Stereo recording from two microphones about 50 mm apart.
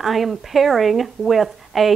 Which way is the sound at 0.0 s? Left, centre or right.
Centre.